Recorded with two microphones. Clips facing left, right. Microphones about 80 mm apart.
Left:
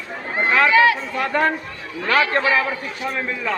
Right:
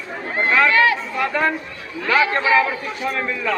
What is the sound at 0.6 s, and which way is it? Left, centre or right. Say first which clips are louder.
Speech: left 2 dB; centre.